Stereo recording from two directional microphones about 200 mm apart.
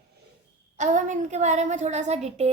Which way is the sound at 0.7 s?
40° right (ahead or behind).